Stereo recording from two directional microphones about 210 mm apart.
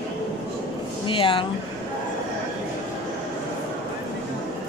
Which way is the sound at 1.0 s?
25° left (ahead or behind).